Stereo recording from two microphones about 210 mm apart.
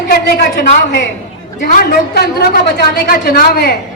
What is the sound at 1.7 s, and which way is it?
A woman's voice, 45° left (ahead or behind).